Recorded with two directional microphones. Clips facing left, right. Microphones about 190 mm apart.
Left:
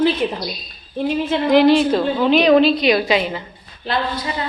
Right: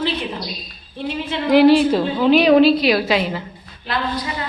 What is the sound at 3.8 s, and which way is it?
Speech, 30° left (ahead or behind).